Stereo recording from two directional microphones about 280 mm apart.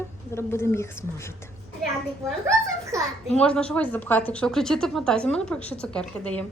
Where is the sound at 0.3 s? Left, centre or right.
Centre.